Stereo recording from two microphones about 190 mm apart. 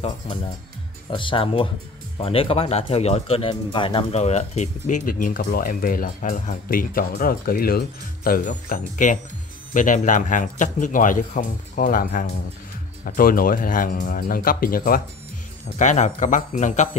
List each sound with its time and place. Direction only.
1.1 s speech: 25° left (ahead or behind)